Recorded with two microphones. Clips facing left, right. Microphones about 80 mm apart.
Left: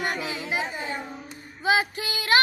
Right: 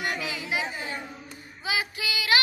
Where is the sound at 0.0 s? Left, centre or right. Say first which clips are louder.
Left 2 dB; left.